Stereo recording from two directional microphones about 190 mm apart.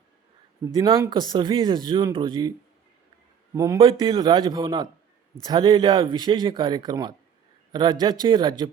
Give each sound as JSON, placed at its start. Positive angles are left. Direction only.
{"t": 0.6, "sound": "speech", "side_deg": -15}
{"t": 3.5, "sound": "a man's voice", "side_deg": -15}
{"t": 3.8, "sound": "speech", "side_deg": -25}